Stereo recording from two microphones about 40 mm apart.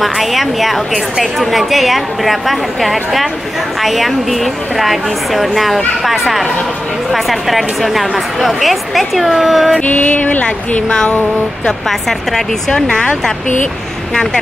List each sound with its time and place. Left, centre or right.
0.0 s a woman's voice: centre
9.8 s speech: left
11.9 s a woman's voice: centre
12.7 s speech: centre